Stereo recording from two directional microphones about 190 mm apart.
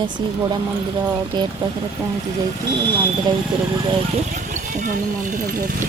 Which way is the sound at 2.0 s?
10° right (ahead or behind).